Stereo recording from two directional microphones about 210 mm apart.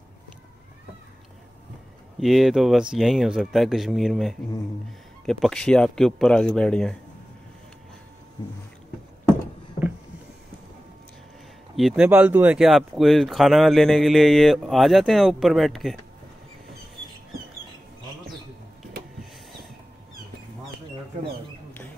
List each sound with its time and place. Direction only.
2.1 s speech: centre (ahead or behind)
8.4 s music: 25° left (ahead or behind)
11.7 s speech: centre (ahead or behind)